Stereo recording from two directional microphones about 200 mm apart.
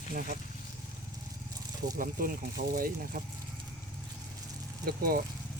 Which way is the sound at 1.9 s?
45° right (ahead or behind).